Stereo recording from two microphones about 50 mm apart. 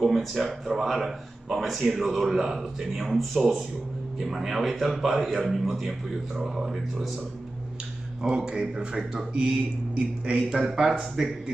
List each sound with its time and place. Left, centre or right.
0.0 s a man's voice: centre
8.2 s speech: centre
10.6 s speech: centre